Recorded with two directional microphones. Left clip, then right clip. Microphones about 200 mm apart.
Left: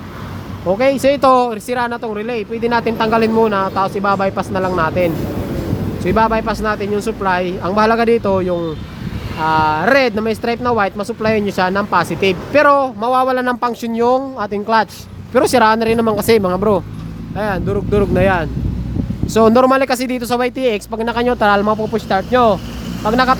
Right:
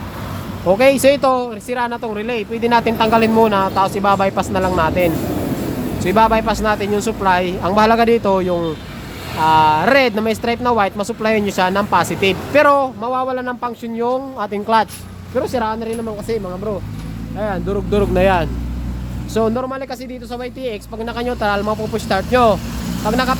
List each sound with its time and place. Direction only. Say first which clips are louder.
0.7 s speech: right 2 dB; 5° left (ahead or behind)
1.2 s speech: left 5 dB; 30° left (ahead or behind); by 12.9 s 10° left (ahead or behind)
13.0 s speech: left 5 dB; 25° left (ahead or behind)
14.3 s speech: left 1 dB; 15° left (ahead or behind)
15.4 s speech: left 8 dB; 50° left (ahead or behind)
17.3 s speech: left 3 dB; 30° left (ahead or behind)
17.7 s speech: even; 10° left (ahead or behind)
19.3 s speech: left 6 dB; 30° left (ahead or behind)
19.5 s speech: left 11 dB; 40° left (ahead or behind); by 22.0 s 25° left (ahead or behind)
22.1 s speech: left 1 dB; 15° left (ahead or behind)